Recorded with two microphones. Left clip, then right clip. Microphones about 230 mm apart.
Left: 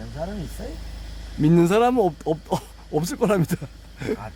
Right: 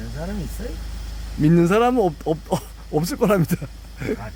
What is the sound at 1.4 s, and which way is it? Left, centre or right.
Speech, centre.